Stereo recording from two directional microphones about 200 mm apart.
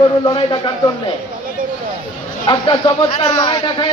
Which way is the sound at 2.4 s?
20° left (ahead or behind).